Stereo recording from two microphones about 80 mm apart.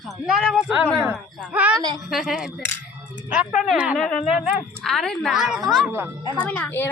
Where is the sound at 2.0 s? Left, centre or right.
Centre.